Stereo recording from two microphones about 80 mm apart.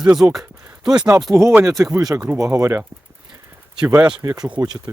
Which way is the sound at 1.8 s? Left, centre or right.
Right.